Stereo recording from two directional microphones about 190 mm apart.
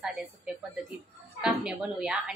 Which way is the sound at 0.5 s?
5° right (ahead or behind).